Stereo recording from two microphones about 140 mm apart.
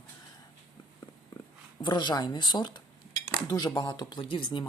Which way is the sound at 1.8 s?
30° left (ahead or behind).